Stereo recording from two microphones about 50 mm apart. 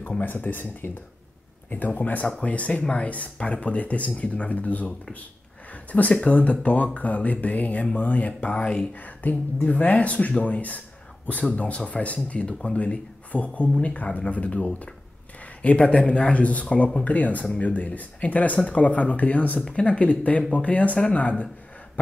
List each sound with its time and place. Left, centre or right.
0.2 s speech: left
2.0 s speech: left